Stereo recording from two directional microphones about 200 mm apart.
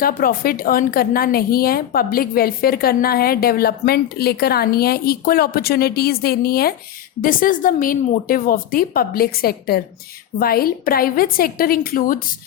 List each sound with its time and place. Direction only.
0.0 s a woman's voice: 45° left (ahead or behind)